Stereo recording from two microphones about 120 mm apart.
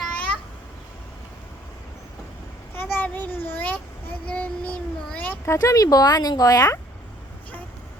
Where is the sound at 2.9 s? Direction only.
15° left (ahead or behind).